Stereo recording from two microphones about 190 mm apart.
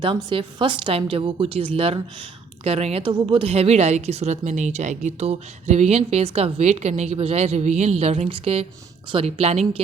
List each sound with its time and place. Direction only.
0.0 s a woman's voice: 25° right (ahead or behind)